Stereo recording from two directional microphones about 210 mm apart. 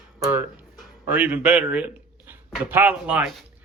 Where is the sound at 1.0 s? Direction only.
5° right (ahead or behind).